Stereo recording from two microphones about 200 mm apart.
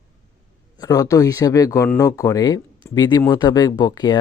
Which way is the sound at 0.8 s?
15° left (ahead or behind).